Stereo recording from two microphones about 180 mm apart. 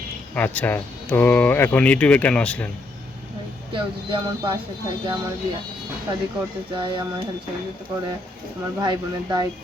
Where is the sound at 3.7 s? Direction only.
25° right (ahead or behind).